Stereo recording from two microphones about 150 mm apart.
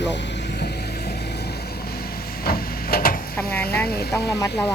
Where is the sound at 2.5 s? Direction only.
90° left.